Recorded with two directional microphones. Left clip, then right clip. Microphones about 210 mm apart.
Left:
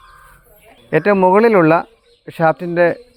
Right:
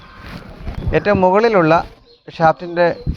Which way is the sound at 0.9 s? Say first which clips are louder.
Left 1 dB; 55° left (ahead or behind).